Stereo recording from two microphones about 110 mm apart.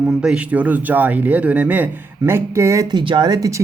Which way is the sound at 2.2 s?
25° right (ahead or behind).